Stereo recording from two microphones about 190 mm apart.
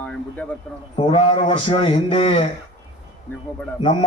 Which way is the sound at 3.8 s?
25° left (ahead or behind).